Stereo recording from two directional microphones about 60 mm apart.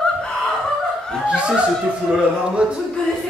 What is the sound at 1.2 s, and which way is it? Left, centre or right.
Chuckle, centre.